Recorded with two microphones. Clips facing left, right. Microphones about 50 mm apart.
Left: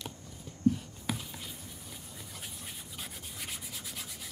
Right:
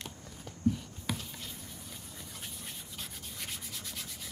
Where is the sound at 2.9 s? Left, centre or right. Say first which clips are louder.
Left 1 dB; centre.